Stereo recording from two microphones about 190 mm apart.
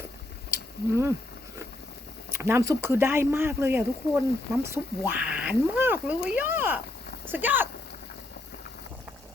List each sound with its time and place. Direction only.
2.3 s speech: 15° right (ahead or behind)